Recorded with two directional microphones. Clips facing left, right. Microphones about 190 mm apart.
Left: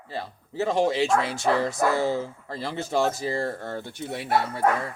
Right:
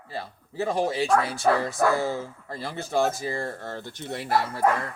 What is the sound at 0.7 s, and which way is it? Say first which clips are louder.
Speech: left 1 dB; 25° left (ahead or behind).